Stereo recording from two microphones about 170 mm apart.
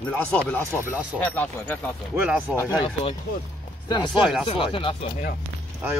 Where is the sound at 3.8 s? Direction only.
25° left (ahead or behind).